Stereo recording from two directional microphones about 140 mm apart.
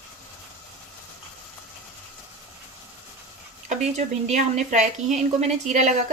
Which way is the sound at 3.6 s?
55° right (ahead or behind).